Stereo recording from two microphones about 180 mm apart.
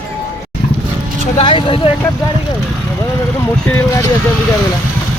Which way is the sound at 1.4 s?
30° left (ahead or behind).